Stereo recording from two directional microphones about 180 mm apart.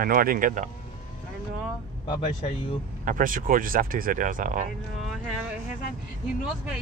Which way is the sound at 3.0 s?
50° right (ahead or behind).